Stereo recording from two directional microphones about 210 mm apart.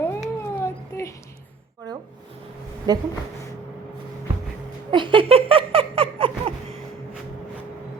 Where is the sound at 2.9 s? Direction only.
20° right (ahead or behind).